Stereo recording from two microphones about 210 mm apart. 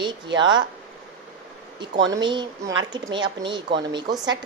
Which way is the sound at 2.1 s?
20° right (ahead or behind).